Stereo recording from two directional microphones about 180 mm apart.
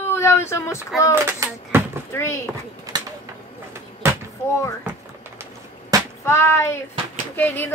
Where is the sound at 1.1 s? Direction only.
15° right (ahead or behind).